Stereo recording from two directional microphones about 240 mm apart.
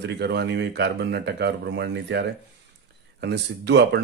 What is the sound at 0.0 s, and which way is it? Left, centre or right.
Speech, right.